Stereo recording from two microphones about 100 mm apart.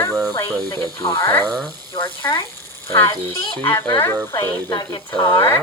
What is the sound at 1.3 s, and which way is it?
Speech, 20° left (ahead or behind).